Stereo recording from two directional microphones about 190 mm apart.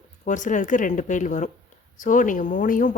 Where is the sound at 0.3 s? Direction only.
40° left (ahead or behind).